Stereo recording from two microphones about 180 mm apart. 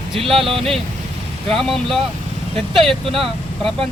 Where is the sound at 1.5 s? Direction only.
Centre (ahead or behind).